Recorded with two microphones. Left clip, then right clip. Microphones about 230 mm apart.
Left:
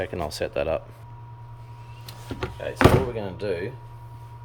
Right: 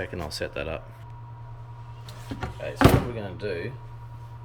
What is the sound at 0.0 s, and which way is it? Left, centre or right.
Speech, centre.